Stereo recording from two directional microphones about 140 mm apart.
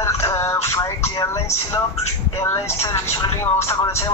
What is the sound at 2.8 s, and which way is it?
Speech, 20° left (ahead or behind).